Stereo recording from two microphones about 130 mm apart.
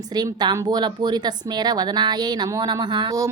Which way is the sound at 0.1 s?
30° right (ahead or behind).